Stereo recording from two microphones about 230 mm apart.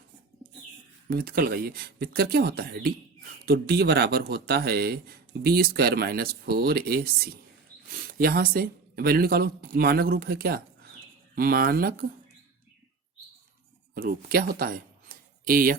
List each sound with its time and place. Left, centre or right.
1.0 s speech: right
13.9 s speech: right